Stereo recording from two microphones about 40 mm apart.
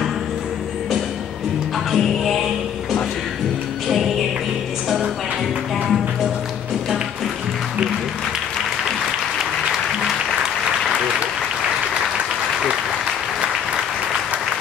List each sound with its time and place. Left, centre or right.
2.0 s music: centre
3.8 s music: centre
9.4 s applause: centre
12.5 s applause: centre